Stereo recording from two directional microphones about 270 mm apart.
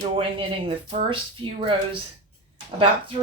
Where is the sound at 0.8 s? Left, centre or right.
Centre.